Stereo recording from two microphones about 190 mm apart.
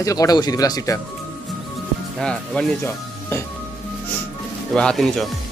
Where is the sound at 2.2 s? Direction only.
5° left (ahead or behind).